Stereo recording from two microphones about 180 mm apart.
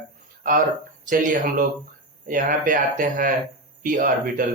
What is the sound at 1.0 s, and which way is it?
Speech, 45° right (ahead or behind).